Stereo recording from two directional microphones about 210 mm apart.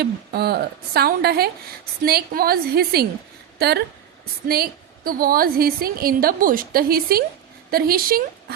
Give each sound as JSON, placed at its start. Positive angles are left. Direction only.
{"t": 0.0, "sound": "a woman's voice", "side_deg": -50}